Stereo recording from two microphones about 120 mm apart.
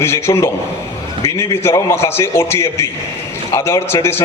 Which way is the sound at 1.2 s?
30° left (ahead or behind).